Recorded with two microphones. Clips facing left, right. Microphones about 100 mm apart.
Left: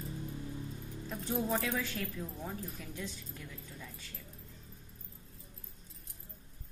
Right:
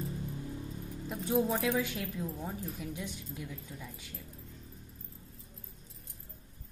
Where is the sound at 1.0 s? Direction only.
15° right (ahead or behind).